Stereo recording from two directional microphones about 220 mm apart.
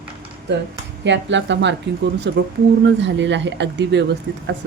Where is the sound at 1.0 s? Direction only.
55° right (ahead or behind).